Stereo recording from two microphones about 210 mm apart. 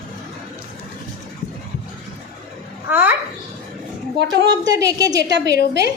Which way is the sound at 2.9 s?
10° right (ahead or behind).